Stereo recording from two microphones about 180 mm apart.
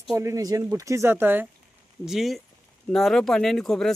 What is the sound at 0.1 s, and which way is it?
Speech, 15° right (ahead or behind).